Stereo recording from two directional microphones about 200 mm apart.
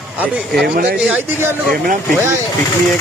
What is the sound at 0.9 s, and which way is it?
Speech, 10° right (ahead or behind).